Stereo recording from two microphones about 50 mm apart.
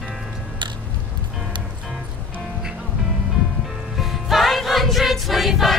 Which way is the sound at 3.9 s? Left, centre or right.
Centre.